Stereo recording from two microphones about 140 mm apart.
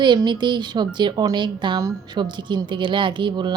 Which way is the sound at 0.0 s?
35° right (ahead or behind).